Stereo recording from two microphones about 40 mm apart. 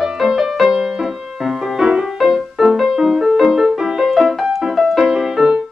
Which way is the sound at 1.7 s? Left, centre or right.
Centre.